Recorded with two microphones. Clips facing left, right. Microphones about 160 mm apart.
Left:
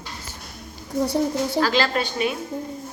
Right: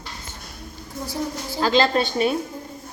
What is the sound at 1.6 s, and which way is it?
Speech, 25° right (ahead or behind).